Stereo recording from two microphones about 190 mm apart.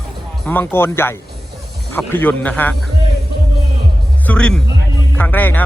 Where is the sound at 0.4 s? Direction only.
10° left (ahead or behind).